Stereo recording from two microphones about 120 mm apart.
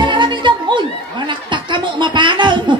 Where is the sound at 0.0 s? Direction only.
40° right (ahead or behind).